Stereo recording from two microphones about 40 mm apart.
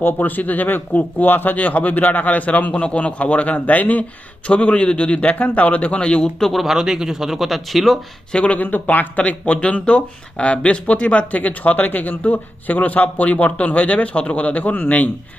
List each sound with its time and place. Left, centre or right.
0.0 s speech: left
1.5 s speech: left
4.4 s a man's voice: left
5.2 s speech: left
6.4 s speech: centre
8.3 s speech: left
8.6 s speech: left